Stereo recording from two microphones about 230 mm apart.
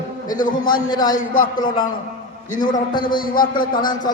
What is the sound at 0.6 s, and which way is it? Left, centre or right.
Speech, centre.